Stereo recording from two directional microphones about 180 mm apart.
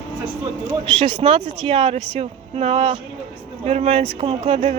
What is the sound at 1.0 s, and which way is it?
Speech, 30° right (ahead or behind).